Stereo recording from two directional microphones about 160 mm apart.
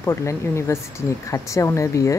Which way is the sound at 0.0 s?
15° left (ahead or behind).